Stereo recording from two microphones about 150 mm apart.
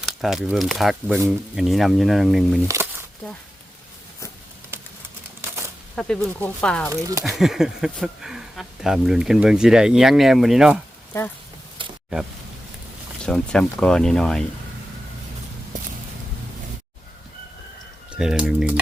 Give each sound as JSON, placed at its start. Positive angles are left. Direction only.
{"t": 0.0, "sound": "a sound", "side_deg": 0}
{"t": 0.5, "sound": "speech", "side_deg": 0}
{"t": 6.0, "sound": "speech", "side_deg": 5}
{"t": 6.9, "sound": "speech", "side_deg": -20}
{"t": 7.3, "sound": "speech", "side_deg": 0}
{"t": 11.1, "sound": "speech", "side_deg": 20}
{"t": 11.8, "sound": "a sound", "side_deg": -35}
{"t": 13.2, "sound": "speech", "side_deg": 5}
{"t": 18.1, "sound": "speech", "side_deg": -5}